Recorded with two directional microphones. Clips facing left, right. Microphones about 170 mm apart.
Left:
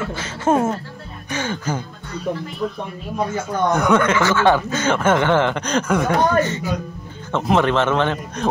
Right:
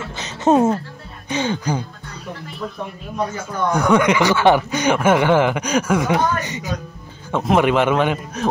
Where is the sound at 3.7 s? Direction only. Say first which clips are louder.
Right 2 dB; 10° right (ahead or behind).